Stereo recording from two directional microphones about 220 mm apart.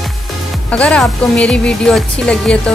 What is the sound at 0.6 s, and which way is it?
Speech, 5° left (ahead or behind).